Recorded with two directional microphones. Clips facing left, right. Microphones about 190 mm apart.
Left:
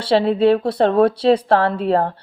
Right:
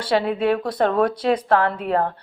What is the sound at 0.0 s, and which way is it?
Speech, 25° left (ahead or behind).